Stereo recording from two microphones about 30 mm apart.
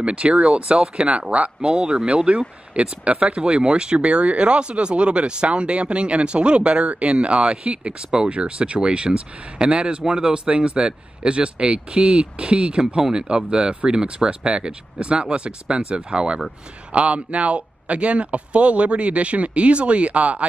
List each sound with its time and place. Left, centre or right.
0.0 s speech: right
16.9 s a man's voice: right